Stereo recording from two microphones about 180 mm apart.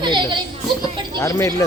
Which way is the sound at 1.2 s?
15° left (ahead or behind).